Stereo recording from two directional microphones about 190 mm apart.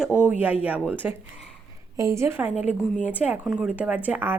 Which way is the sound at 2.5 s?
40° left (ahead or behind).